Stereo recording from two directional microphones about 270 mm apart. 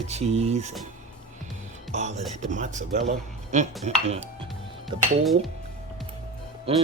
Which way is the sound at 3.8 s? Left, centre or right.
Right.